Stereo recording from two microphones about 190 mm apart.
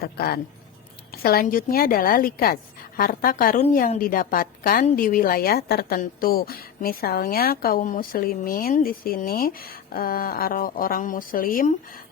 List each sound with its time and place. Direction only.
0.0 s a woman's voice: 55° left (ahead or behind)